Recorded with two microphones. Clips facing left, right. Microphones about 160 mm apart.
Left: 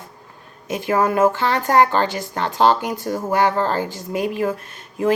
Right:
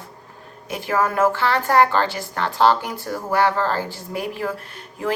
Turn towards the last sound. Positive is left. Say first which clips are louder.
# left 6 dB
turn(degrees=20)  # may be behind; listen again after turning